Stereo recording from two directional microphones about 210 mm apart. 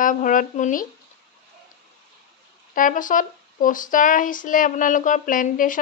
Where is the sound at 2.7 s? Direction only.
40° left (ahead or behind).